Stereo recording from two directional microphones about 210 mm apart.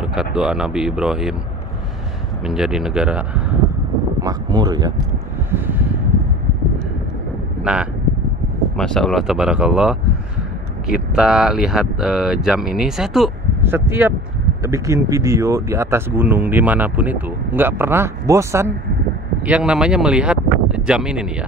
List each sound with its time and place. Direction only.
0.0 s speech: 5° right (ahead or behind)
2.4 s speech: centre (ahead or behind)
4.2 s speech: 20° right (ahead or behind)
5.5 s a sound: 10° right (ahead or behind)
7.6 s speech: 5° right (ahead or behind)